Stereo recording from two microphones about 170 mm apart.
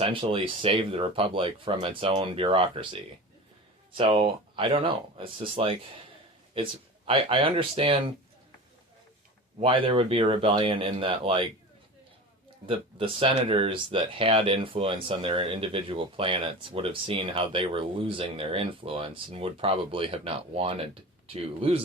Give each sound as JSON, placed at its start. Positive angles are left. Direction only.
{"t": 0.0, "sound": "speech", "side_deg": -30}
{"t": 9.6, "sound": "speech", "side_deg": -30}
{"t": 12.6, "sound": "speech", "side_deg": -30}